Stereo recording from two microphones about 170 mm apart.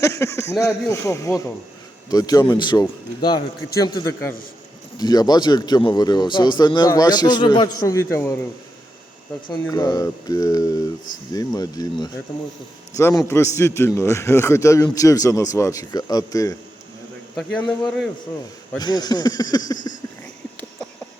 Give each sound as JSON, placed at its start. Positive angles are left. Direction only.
{"t": 0.0, "sound": "a man's voice", "side_deg": 15}
{"t": 9.6, "sound": "a man's voice", "side_deg": 15}
{"t": 17.3, "sound": "speech", "side_deg": 5}
{"t": 18.8, "sound": "a man's voice", "side_deg": 25}